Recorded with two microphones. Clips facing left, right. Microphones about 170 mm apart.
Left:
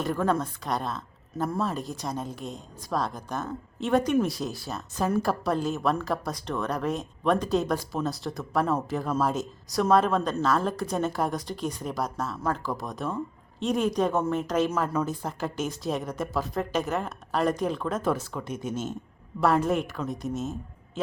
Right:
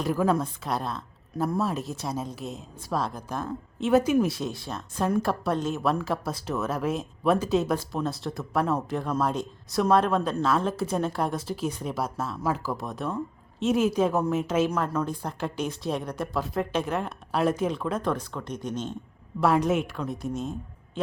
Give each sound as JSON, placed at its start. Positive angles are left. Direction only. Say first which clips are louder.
{"t": 0.0, "sound": "speech", "louder": "right 2 dB", "side_deg": -5}